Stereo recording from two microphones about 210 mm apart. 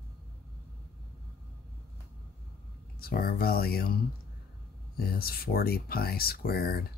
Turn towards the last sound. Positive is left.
turn(degrees=45)  # may be behind; listen again after turning